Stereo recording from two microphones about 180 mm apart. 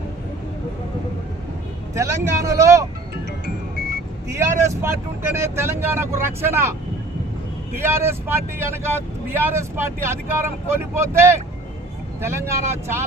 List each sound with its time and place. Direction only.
2.0 s speech: 15° right (ahead or behind)
3.4 s music: 60° right (ahead or behind)
4.3 s speech: 15° right (ahead or behind)
7.8 s speech: 15° right (ahead or behind)
12.2 s speech: 15° right (ahead or behind)